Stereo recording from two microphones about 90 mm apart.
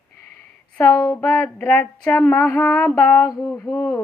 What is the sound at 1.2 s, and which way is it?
Speech, 25° left (ahead or behind).